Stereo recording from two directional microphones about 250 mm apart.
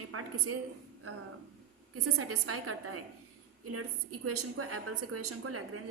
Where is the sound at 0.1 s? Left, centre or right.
Right.